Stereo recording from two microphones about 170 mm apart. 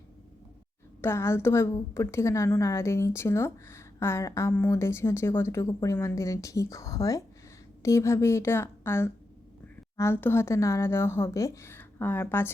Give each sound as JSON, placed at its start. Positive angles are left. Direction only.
{"t": 1.0, "sound": "a woman's voice", "side_deg": 15}